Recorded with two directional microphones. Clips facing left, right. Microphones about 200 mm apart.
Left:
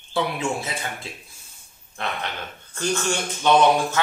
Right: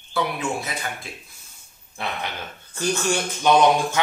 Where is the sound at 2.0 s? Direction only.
10° right (ahead or behind).